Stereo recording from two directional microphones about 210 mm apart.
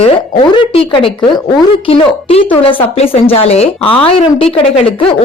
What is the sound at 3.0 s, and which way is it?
Speech, 30° left (ahead or behind).